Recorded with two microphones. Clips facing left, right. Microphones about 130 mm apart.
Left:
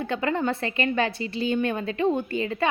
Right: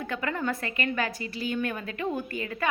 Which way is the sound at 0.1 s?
25° left (ahead or behind).